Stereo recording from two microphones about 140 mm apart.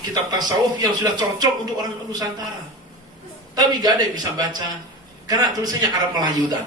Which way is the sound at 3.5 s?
30° right (ahead or behind).